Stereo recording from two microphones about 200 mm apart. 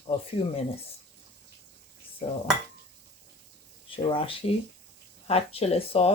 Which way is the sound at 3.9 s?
25° left (ahead or behind).